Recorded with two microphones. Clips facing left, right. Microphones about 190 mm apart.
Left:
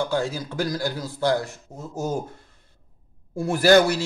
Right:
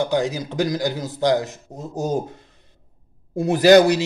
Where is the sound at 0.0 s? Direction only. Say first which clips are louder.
Right 4 dB; 15° right (ahead or behind).